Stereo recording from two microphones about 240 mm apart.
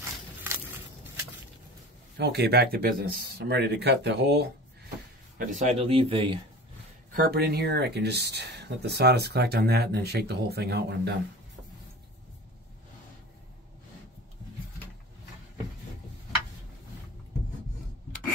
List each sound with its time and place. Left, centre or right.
0.4 s a sound: centre
2.1 s speech: right
5.4 s a man's voice: right
7.1 s speech: right